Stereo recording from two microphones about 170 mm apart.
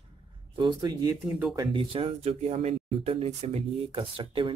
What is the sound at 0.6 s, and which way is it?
Speech, 25° right (ahead or behind).